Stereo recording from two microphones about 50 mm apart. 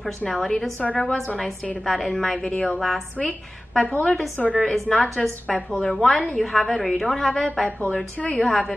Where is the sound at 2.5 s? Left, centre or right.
Centre.